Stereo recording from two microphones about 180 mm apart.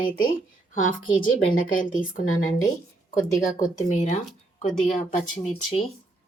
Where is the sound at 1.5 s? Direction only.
50° left (ahead or behind).